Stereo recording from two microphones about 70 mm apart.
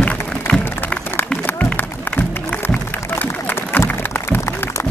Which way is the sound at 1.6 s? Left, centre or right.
Left.